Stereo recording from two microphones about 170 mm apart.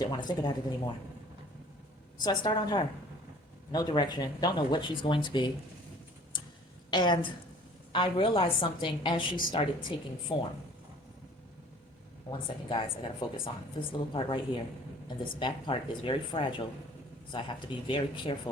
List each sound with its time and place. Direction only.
0.0 s speech: 25° left (ahead or behind)
2.1 s speech: 25° left (ahead or behind)
6.3 s tick-tock: 25° left (ahead or behind)
6.9 s a woman's voice: 25° left (ahead or behind)
12.3 s a woman's voice: 30° left (ahead or behind)